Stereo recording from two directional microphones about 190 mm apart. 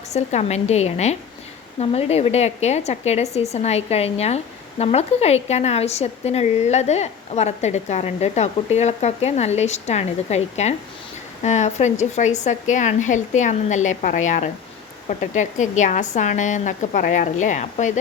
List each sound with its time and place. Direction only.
0.1 s a woman's voice: 35° left (ahead or behind)